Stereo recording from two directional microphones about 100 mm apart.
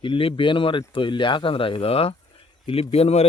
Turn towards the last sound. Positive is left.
turn(degrees=90)